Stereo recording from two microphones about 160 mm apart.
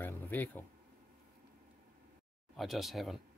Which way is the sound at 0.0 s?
10° left (ahead or behind).